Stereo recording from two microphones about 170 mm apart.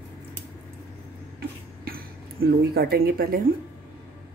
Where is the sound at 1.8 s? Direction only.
60° right (ahead or behind).